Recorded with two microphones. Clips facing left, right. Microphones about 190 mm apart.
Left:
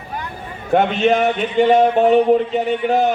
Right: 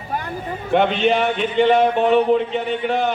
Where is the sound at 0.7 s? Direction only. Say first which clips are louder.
Left 2 dB; 45° left (ahead or behind).